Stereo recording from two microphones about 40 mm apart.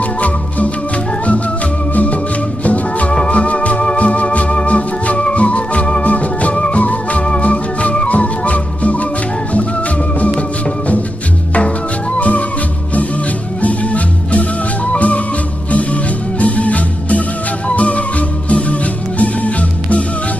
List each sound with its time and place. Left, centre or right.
0.0 s music: left
2.6 s music: left
3.3 s organ: left
6.0 s music: left
6.5 s music: left
6.8 s music: left
12.2 s music: left
13.6 s music: left